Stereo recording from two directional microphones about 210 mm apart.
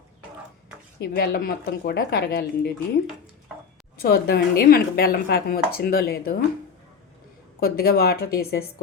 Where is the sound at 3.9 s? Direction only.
45° left (ahead or behind).